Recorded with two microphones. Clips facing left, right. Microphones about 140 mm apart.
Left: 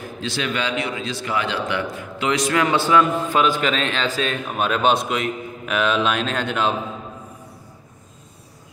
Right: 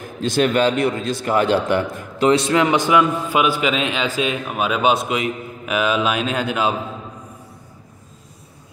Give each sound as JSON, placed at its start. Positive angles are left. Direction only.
{"t": 0.2, "sound": "a man's voice", "side_deg": -45}
{"t": 2.3, "sound": "a man's voice", "side_deg": -25}